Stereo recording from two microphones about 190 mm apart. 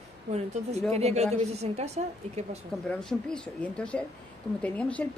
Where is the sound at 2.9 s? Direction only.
5° left (ahead or behind).